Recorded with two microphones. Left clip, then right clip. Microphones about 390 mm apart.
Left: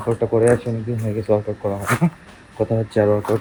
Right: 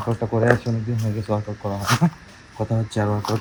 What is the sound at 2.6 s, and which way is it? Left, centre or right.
Speech, centre.